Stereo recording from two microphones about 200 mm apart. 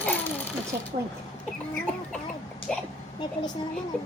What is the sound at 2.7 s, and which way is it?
Speech, 5° left (ahead or behind).